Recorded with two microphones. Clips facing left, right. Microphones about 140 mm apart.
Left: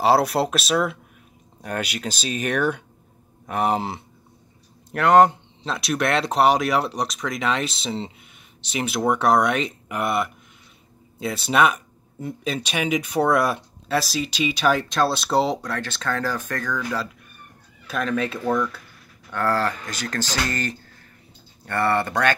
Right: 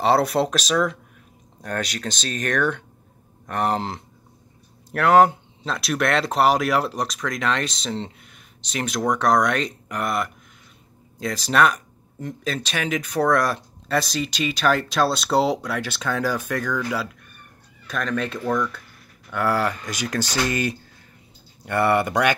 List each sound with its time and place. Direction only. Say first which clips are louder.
0.0 s speech: even; centre (ahead or behind)
17.8 s speech: left 1 dB; 5° left (ahead or behind)
19.3 s speech: even; 10° right (ahead or behind)